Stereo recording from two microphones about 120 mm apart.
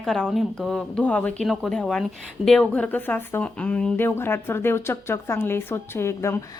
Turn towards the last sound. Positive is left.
turn(degrees=20)  # may be behind; listen again after turning